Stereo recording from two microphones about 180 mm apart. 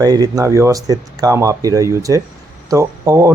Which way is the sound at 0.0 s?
20° right (ahead or behind).